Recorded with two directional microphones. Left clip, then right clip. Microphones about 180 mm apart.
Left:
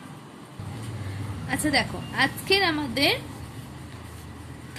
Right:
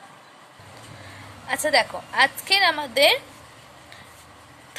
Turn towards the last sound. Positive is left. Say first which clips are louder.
# right 5 dB
turn(degrees=-25)  # may be behind; listen again after turning